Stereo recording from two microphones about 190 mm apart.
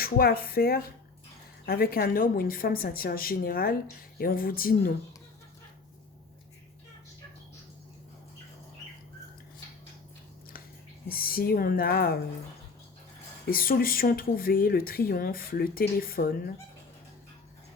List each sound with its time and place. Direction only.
0.0 s speech: 50° left (ahead or behind)
11.1 s speech: 50° left (ahead or behind)
13.5 s speech: 50° left (ahead or behind)